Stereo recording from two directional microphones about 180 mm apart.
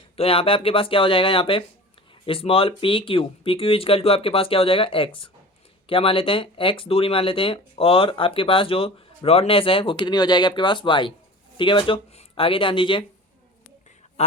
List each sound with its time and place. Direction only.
0.2 s speech: 30° left (ahead or behind)
14.2 s quack: 40° left (ahead or behind)